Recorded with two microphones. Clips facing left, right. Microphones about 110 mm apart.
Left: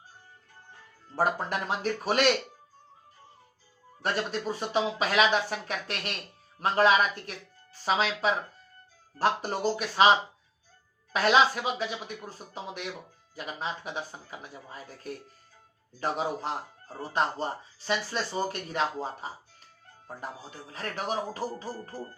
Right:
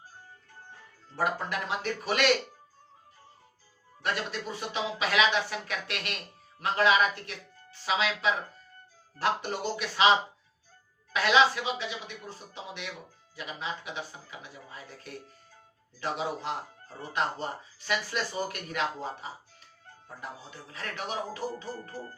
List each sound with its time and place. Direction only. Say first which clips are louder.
1.1 s speech: left 2 dB; 40° left (ahead or behind)
4.0 s speech: left 3 dB; 35° left (ahead or behind)